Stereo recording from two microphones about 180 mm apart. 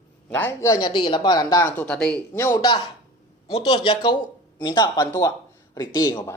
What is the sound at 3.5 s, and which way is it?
Speech, 30° left (ahead or behind).